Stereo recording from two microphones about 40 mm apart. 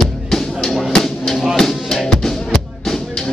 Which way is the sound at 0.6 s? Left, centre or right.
Centre.